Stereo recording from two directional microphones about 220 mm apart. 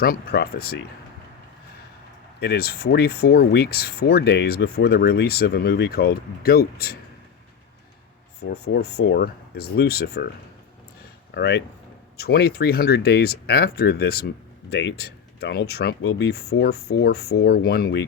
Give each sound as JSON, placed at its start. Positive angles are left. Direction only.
{"t": 0.0, "sound": "speech", "side_deg": 45}
{"t": 2.4, "sound": "speech", "side_deg": 45}
{"t": 8.7, "sound": "speech", "side_deg": 45}
{"t": 11.3, "sound": "speech", "side_deg": 50}